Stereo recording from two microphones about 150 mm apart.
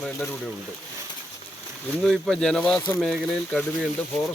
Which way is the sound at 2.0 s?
5° left (ahead or behind).